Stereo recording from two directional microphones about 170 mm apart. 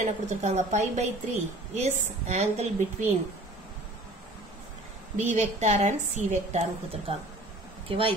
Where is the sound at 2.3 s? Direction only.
40° right (ahead or behind).